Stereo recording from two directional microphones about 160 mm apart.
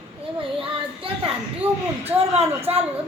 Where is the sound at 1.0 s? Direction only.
35° right (ahead or behind).